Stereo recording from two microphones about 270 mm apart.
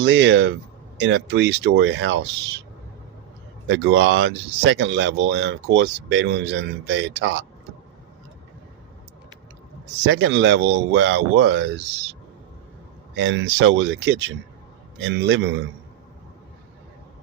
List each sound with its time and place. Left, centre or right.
0.0 s speech: right
3.7 s speech: right
10.0 s speech: right
13.1 s speech: right